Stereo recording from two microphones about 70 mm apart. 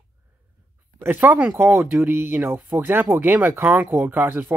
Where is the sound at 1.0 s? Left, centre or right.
Right.